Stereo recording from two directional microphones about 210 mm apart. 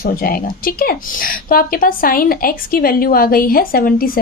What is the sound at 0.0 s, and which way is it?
A woman's voice, 45° left (ahead or behind).